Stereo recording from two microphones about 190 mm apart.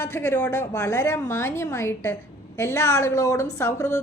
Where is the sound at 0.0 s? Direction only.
10° left (ahead or behind).